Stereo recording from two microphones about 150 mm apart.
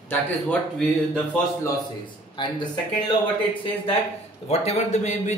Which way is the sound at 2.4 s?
30° left (ahead or behind).